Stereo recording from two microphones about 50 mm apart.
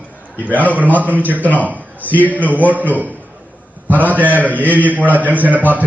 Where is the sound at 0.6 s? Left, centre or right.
Right.